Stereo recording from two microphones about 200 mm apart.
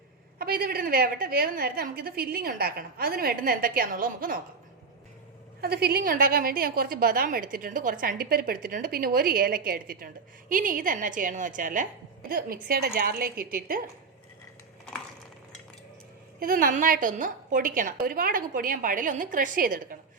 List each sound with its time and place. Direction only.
0.3 s a woman's voice: 50° right (ahead or behind)
5.5 s a woman's voice: 50° right (ahead or behind)
16.4 s a woman's voice: 45° right (ahead or behind)